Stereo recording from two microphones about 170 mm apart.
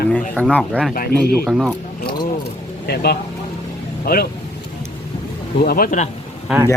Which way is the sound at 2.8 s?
70° left (ahead or behind).